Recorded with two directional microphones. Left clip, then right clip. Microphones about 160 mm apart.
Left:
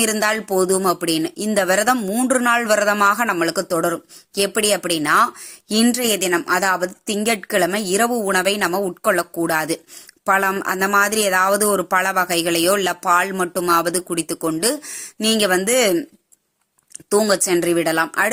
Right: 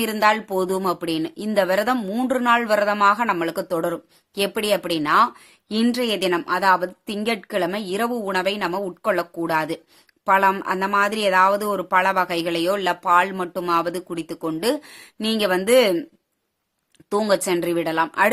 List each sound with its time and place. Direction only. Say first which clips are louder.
0.0 s speech: even; 20° left (ahead or behind)
17.1 s speech: left 3 dB; 20° left (ahead or behind)